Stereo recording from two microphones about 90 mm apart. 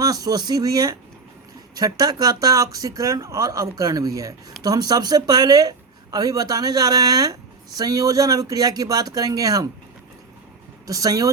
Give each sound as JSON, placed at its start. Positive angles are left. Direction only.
{"t": 0.0, "sound": "speech", "side_deg": -45}
{"t": 10.8, "sound": "speech", "side_deg": -40}